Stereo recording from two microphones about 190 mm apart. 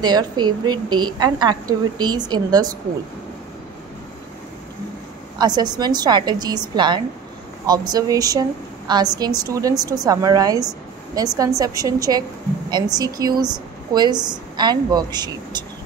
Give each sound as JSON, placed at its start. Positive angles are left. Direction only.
{"t": 0.0, "sound": "a woman's voice", "side_deg": -20}
{"t": 5.4, "sound": "a woman's voice", "side_deg": -20}